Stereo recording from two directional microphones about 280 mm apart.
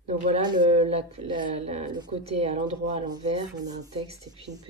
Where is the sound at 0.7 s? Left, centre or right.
Right.